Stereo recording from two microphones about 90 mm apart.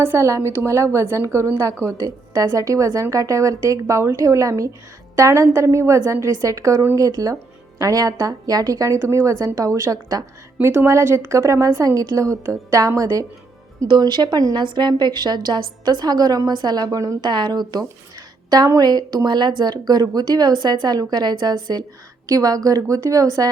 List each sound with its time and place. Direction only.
0.0 s a woman's voice: 30° right (ahead or behind)
10.6 s a woman's voice: 30° right (ahead or behind)
13.8 s a woman's voice: 55° right (ahead or behind)
17.2 s a woman's voice: 55° right (ahead or behind)